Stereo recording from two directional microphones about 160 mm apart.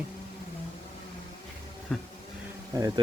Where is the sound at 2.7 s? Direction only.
20° right (ahead or behind).